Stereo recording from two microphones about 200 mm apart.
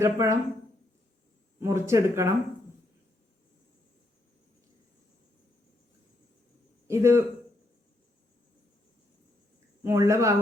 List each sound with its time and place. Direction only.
0.0 s speech: 15° right (ahead or behind)
1.5 s speech: 15° right (ahead or behind)
6.8 s a man's voice: 15° right (ahead or behind)
9.8 s speech: 15° right (ahead or behind)